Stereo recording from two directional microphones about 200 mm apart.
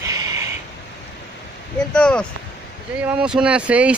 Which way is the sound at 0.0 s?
15° right (ahead or behind).